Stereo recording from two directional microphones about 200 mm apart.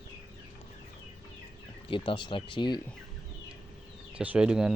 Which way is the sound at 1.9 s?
25° left (ahead or behind).